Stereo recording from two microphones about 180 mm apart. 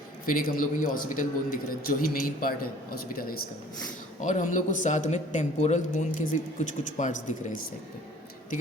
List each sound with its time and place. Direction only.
0.3 s a man's voice: 50° left (ahead or behind)
4.2 s a man's voice: 45° left (ahead or behind)